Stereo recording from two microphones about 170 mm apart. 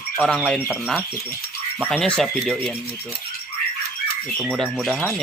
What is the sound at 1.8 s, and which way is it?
Speech, centre (ahead or behind).